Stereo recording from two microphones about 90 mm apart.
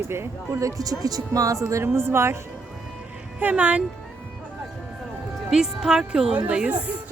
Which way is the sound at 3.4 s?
15° right (ahead or behind).